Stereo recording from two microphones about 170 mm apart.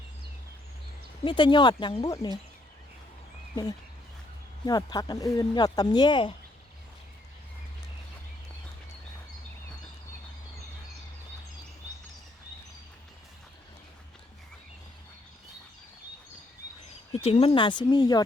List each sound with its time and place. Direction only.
1.2 s speech: 30° left (ahead or behind)
3.5 s speech: 25° left (ahead or behind)
17.1 s speech: 35° left (ahead or behind)